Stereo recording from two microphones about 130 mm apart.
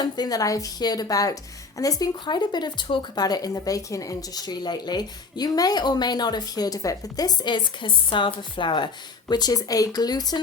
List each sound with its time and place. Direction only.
0.0 s a woman's voice: 30° left (ahead or behind)